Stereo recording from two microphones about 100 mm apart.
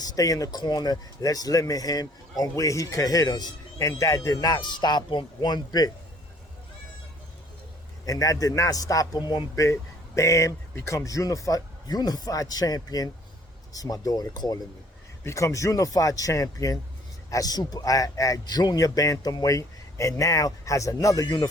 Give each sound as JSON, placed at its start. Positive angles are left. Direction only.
{"t": 0.0, "sound": "speech", "side_deg": 35}
{"t": 8.0, "sound": "speech", "side_deg": 35}
{"t": 10.2, "sound": "speech", "side_deg": 30}
{"t": 15.2, "sound": "speech", "side_deg": 30}